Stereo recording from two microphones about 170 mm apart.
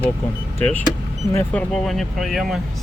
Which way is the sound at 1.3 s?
10° left (ahead or behind).